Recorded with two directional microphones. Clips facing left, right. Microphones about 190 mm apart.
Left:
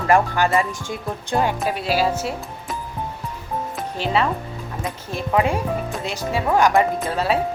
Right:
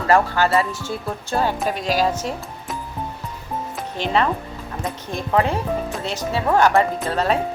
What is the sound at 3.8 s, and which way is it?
Music, 5° left (ahead or behind).